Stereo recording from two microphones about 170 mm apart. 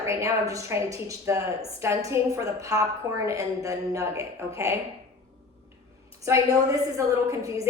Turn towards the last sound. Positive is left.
turn(degrees=-20)  # may be behind; listen again after turning